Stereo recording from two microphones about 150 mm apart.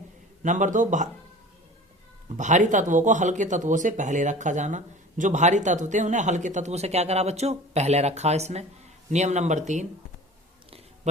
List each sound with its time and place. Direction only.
0.4 s a man's voice: 55° right (ahead or behind)
2.3 s speech: 55° right (ahead or behind)
11.1 s a sound: 50° right (ahead or behind)